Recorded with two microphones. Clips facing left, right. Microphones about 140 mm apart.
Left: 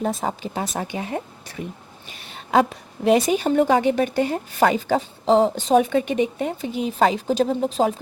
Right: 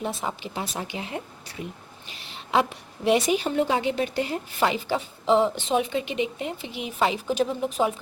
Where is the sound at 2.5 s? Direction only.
40° left (ahead or behind).